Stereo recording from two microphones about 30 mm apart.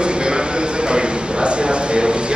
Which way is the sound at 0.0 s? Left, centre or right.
Right.